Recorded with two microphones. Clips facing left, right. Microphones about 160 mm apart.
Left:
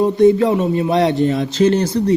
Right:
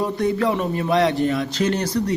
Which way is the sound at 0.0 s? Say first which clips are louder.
Left 9 dB; 25° left (ahead or behind).